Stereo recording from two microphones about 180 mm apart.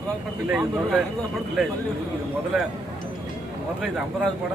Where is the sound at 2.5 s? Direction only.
Centre (ahead or behind).